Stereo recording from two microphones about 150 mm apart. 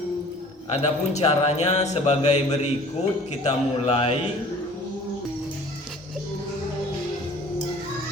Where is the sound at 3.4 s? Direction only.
40° left (ahead or behind).